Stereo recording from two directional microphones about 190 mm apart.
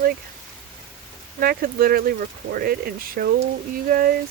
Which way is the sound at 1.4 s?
50° right (ahead or behind).